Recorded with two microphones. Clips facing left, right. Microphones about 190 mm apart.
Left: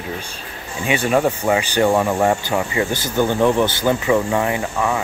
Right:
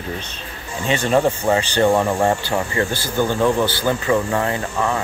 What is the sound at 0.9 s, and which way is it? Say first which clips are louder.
Speech: even; 10° left (ahead or behind).